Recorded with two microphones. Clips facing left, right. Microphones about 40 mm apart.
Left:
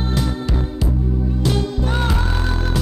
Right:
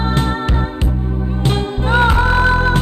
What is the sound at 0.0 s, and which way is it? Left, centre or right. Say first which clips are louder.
Music: right 5 dB; right.